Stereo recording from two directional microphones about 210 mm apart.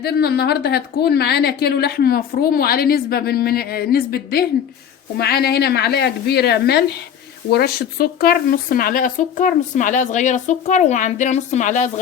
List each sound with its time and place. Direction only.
0.0 s a woman's voice: 50° left (ahead or behind)